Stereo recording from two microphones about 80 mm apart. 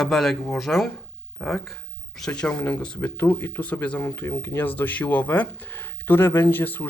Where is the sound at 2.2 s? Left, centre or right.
Centre.